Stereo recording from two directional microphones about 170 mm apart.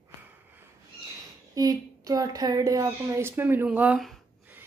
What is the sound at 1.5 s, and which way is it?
Speech, 20° right (ahead or behind).